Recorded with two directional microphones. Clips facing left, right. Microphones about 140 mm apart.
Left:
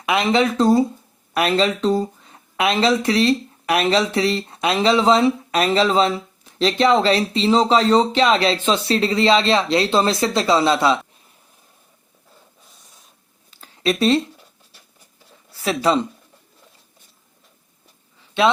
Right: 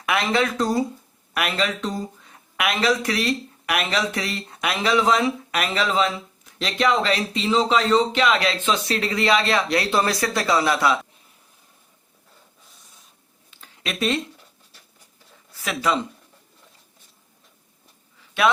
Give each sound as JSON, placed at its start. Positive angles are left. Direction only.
{"t": 0.0, "sound": "speech", "side_deg": 20}
{"t": 13.5, "sound": "a sound", "side_deg": 35}
{"t": 15.6, "sound": "speech", "side_deg": 30}
{"t": 18.4, "sound": "speech", "side_deg": 25}